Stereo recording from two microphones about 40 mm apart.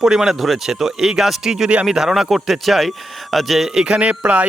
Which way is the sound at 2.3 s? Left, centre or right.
Centre.